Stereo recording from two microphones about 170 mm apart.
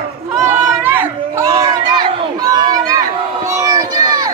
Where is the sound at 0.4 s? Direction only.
10° right (ahead or behind).